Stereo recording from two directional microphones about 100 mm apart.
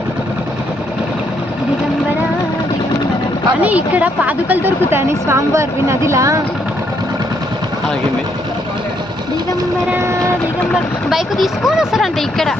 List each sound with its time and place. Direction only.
3.6 s a woman's voice: 15° right (ahead or behind); by 6.4 s 30° right (ahead or behind)
9.9 s vehicle: 25° right (ahead or behind)
11.1 s speech: 5° right (ahead or behind)